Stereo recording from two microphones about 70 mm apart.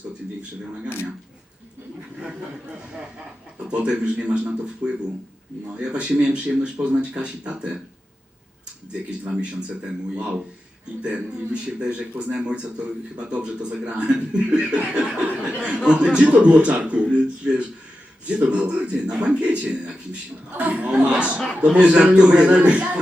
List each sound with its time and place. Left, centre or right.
3.7 s speech: centre
9.2 s a man's voice: centre